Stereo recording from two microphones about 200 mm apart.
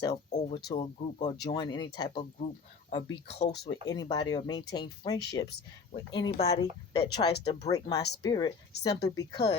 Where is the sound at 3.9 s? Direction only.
20° left (ahead or behind).